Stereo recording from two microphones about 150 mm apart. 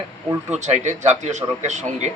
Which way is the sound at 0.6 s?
50° right (ahead or behind).